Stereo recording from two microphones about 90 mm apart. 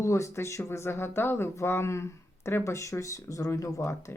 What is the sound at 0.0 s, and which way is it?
Speech, 35° left (ahead or behind).